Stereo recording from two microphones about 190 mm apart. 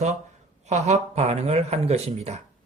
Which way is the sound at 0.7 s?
35° right (ahead or behind).